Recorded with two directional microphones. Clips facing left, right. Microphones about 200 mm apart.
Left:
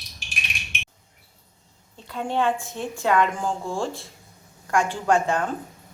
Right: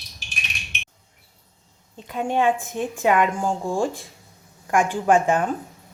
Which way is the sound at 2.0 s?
15° right (ahead or behind).